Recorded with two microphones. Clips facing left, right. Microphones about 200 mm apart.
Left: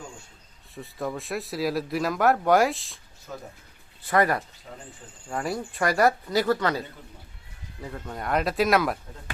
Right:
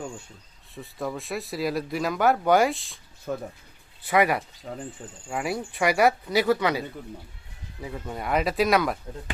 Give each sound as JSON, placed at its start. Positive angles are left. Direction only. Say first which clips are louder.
{"t": 0.7, "sound": "speech", "louder": "even", "side_deg": 0}
{"t": 3.3, "sound": "speech", "louder": "right 8 dB", "side_deg": -55}
{"t": 4.1, "sound": "speech", "louder": "right 1 dB", "side_deg": -10}